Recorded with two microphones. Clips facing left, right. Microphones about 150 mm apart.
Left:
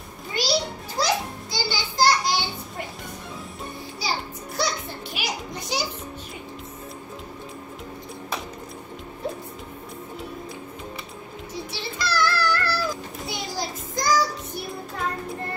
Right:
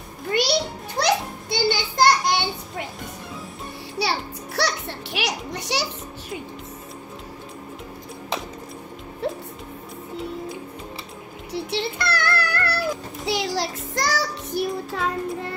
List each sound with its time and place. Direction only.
0.3 s children playing: 60° right (ahead or behind)
4.0 s music: 70° right (ahead or behind)
11.5 s music: 65° right (ahead or behind)